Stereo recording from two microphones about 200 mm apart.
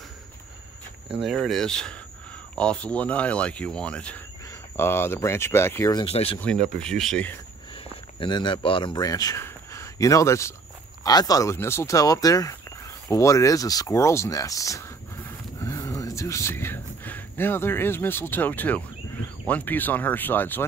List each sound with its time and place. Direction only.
1.1 s speech: centre (ahead or behind); by 6.4 s 30° left (ahead or behind)
6.8 s speech: centre (ahead or behind)
7.7 s speech: 25° left (ahead or behind); by 20.6 s 10° left (ahead or behind)